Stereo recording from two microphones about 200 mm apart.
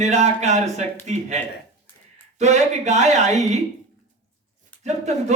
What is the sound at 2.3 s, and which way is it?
A man's voice, 35° right (ahead or behind).